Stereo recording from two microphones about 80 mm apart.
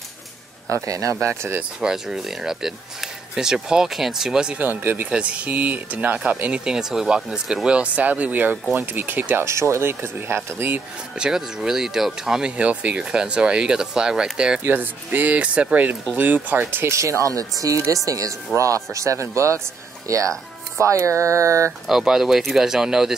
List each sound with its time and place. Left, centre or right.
0.7 s speech: right
1.3 s speech: right
1.6 s speech: centre
4.6 s speech: right
9.5 s speech: right
11.1 s speech: centre
14.6 s speech: right
17.2 s speech: right
21.8 s speech: centre